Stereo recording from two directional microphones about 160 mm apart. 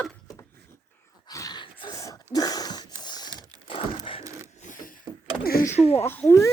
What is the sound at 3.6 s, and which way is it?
Crumpling, 35° left (ahead or behind).